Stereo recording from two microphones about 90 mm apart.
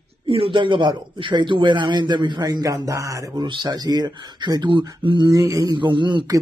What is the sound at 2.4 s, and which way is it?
A man's voice, 45° right (ahead or behind).